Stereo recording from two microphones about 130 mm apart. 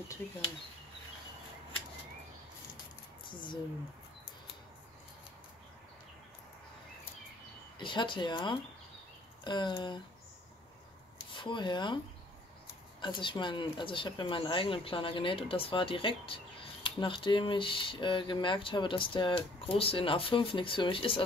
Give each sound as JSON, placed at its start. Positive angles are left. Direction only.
{"t": 0.2, "sound": "speech", "side_deg": 10}
{"t": 3.3, "sound": "speech", "side_deg": 35}
{"t": 7.8, "sound": "speech", "side_deg": 40}
{"t": 11.3, "sound": "speech", "side_deg": 40}
{"t": 13.0, "sound": "speech", "side_deg": 40}